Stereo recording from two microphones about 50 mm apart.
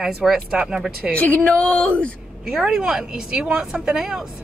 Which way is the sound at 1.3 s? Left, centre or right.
Left.